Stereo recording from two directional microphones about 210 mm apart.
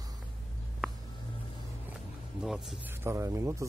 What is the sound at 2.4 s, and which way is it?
Speech, centre (ahead or behind).